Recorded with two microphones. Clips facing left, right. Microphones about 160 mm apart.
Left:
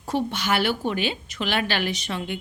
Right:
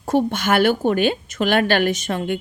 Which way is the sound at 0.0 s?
50° right (ahead or behind).